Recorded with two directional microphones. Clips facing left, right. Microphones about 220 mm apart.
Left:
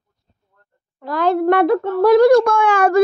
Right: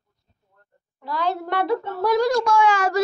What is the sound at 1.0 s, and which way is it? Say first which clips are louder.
A child's voice: left 10 dB; 50° left (ahead or behind).